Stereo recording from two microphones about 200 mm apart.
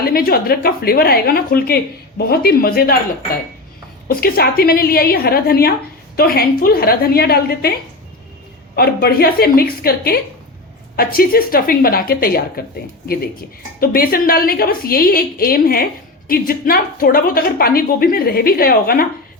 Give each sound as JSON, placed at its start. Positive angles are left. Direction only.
{"t": 0.0, "sound": "a woman's voice", "side_deg": 50}
{"t": 4.1, "sound": "a woman's voice", "side_deg": 50}
{"t": 8.7, "sound": "a woman's voice", "side_deg": 50}